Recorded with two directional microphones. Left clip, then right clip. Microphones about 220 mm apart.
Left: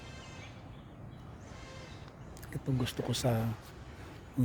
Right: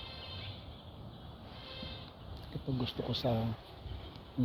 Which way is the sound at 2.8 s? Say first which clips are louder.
Left 1 dB; 55° left (ahead or behind).